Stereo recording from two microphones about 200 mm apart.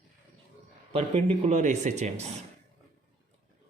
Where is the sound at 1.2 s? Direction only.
30° right (ahead or behind).